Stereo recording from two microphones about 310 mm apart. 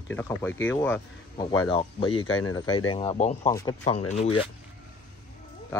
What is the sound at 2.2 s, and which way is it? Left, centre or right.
Speech, left.